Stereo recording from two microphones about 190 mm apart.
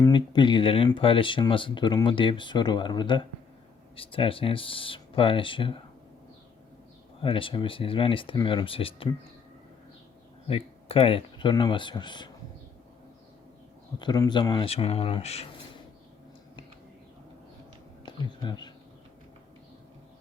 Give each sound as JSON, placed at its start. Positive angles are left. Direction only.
{"t": 0.0, "sound": "speech", "side_deg": 25}
{"t": 7.2, "sound": "speech", "side_deg": 25}
{"t": 10.5, "sound": "speech", "side_deg": 30}
{"t": 14.0, "sound": "speech", "side_deg": 20}
{"t": 18.0, "sound": "speech", "side_deg": 25}